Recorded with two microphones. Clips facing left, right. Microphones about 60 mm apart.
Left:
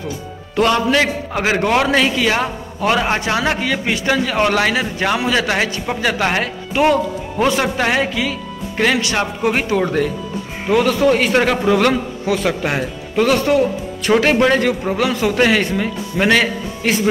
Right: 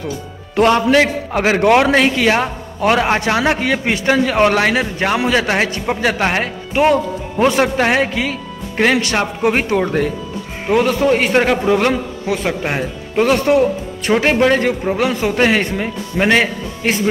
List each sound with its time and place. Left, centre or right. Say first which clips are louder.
0.6 s a man's voice: right 3 dB; right
3.2 s a man's voice: right 2 dB; right
6.8 s speech: right 1 dB; right
7.6 s a man's voice: right 2 dB; right